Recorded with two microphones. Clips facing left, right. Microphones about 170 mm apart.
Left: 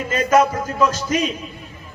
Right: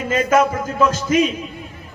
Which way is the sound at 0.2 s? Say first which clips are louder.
Left 1 dB; 50° right (ahead or behind).